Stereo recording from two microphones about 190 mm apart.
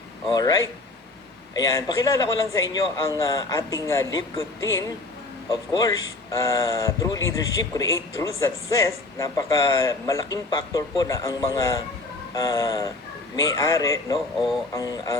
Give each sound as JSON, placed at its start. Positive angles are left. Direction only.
{"t": 0.3, "sound": "a man's voice", "side_deg": 20}
{"t": 6.3, "sound": "a man's voice", "side_deg": 15}
{"t": 14.3, "sound": "speech", "side_deg": 0}
{"t": 14.8, "sound": "speech", "side_deg": 20}